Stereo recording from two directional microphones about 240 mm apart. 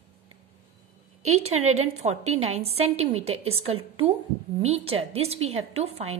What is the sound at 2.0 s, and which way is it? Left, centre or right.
A woman's voice, right.